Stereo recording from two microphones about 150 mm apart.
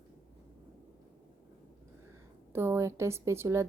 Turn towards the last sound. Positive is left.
turn(degrees=-20)  # may be behind; listen again after turning